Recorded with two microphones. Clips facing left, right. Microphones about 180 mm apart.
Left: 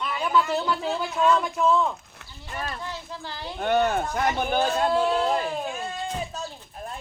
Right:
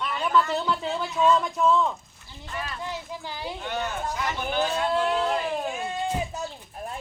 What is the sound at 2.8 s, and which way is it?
Speech, 15° right (ahead or behind).